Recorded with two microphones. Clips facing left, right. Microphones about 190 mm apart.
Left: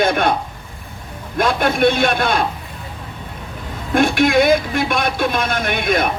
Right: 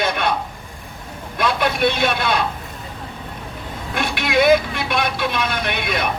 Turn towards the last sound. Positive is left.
turn(degrees=50)  # may be behind; listen again after turning